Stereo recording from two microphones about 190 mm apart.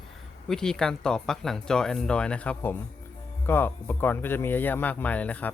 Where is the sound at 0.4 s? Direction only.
5° left (ahead or behind).